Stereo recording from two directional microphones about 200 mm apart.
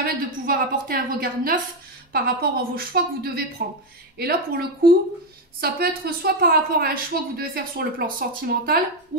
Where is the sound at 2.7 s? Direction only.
50° right (ahead or behind).